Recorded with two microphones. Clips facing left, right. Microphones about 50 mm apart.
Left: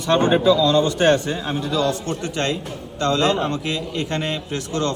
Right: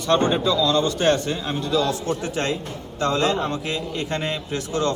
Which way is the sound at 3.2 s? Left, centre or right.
Left.